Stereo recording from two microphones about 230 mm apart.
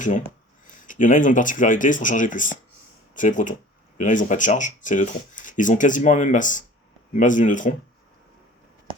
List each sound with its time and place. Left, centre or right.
0.0 s speech: left